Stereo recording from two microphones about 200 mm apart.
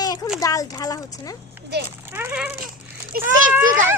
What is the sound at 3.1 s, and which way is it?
Speech, 50° right (ahead or behind).